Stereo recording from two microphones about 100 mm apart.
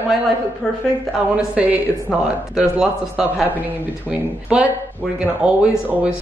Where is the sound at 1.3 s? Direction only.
15° right (ahead or behind).